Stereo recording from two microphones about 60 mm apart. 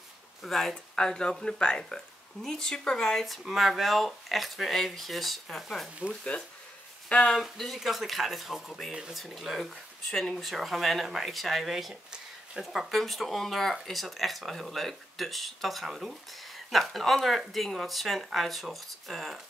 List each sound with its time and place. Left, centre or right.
0.4 s speech: centre
7.1 s speech: centre
7.3 s speech: centre
8.9 s speech: centre
10.5 s speech: centre
12.9 s speech: centre